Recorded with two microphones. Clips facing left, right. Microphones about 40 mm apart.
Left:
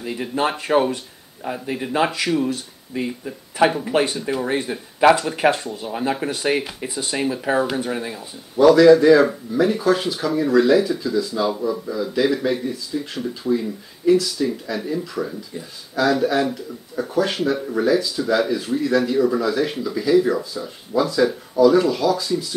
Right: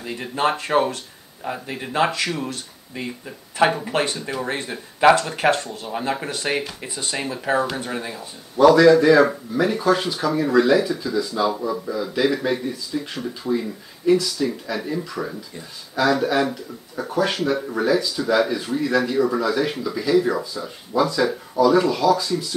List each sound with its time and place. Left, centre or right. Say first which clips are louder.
0.0 s speech: even; centre